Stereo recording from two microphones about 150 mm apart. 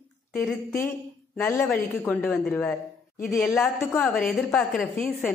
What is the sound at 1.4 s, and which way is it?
A woman's voice, 15° left (ahead or behind).